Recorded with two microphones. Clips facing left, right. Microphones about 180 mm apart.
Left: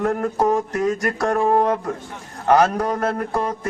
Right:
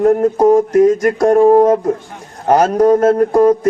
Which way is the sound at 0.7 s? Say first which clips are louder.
Right 11 dB; 20° right (ahead or behind).